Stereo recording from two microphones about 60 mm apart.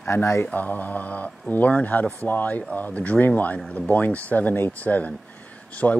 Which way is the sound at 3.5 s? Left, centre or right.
Centre.